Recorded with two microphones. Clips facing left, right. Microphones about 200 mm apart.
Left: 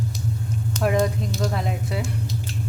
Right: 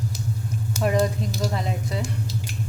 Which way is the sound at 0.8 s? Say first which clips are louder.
Left 1 dB; centre (ahead or behind).